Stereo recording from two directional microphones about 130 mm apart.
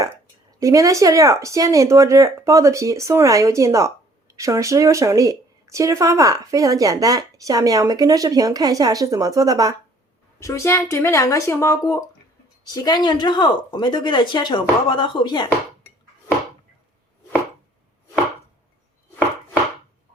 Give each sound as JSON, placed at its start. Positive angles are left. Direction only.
{"t": 0.6, "sound": "speech", "side_deg": -25}
{"t": 10.4, "sound": "speech", "side_deg": 20}